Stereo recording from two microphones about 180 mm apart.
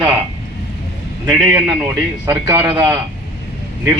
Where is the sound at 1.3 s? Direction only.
5° right (ahead or behind).